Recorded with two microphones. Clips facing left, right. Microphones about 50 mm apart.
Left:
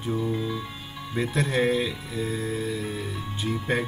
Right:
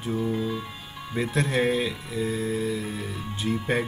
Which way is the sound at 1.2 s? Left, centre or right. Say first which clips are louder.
Even; centre.